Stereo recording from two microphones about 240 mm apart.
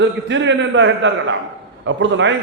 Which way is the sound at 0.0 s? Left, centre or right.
Right.